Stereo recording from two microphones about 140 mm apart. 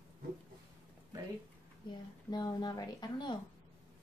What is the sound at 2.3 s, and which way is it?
Speech, 30° left (ahead or behind).